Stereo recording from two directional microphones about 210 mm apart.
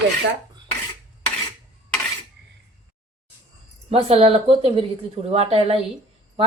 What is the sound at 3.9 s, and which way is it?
Speech, 25° right (ahead or behind).